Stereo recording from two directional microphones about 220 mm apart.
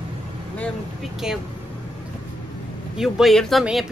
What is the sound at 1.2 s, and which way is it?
Speech, 5° right (ahead or behind).